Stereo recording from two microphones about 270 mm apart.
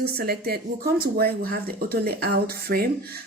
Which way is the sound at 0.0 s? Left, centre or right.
Right.